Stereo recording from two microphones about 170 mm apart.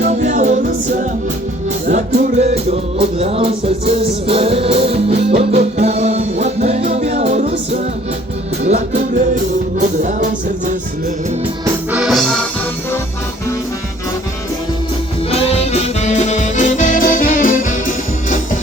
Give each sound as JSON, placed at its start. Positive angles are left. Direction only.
{"t": 0.0, "sound": "music", "side_deg": -45}
{"t": 1.9, "sound": "music", "side_deg": -45}
{"t": 9.8, "sound": "music", "side_deg": -45}
{"t": 11.9, "sound": "music", "side_deg": -5}
{"t": 15.3, "sound": "music", "side_deg": 40}